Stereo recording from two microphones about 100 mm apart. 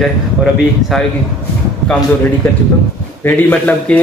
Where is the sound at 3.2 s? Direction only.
20° left (ahead or behind).